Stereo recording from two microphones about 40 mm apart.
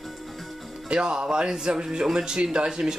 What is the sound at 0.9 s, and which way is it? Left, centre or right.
Speech, centre.